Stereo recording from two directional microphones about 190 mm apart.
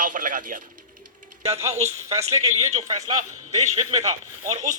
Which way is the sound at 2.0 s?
15° right (ahead or behind).